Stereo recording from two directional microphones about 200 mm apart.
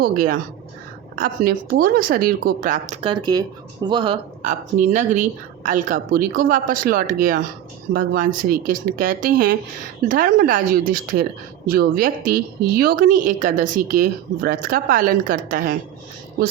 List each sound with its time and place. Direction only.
0.0 s a woman's voice: 45° right (ahead or behind)
3.1 s speech: 20° right (ahead or behind)
4.4 s a woman's voice: 35° right (ahead or behind)